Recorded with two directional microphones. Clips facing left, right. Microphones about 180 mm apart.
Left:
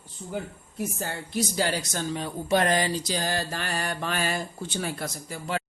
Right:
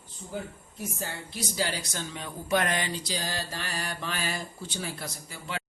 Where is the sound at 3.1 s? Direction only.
55° left (ahead or behind).